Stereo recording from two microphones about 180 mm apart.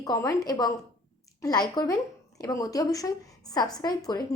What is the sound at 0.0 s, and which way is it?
Speech, 20° left (ahead or behind).